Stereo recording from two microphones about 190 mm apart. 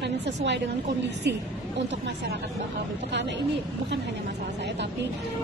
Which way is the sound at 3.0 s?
65° right (ahead or behind).